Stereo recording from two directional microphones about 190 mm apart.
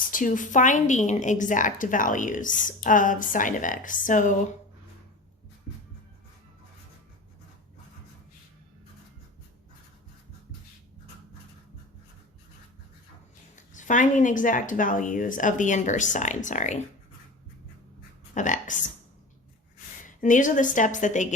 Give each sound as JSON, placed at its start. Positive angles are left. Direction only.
{"t": 0.1, "sound": "a woman's voice", "side_deg": 45}
{"t": 13.7, "sound": "speech", "side_deg": 40}
{"t": 18.3, "sound": "speech", "side_deg": 40}
{"t": 20.1, "sound": "a woman's voice", "side_deg": 45}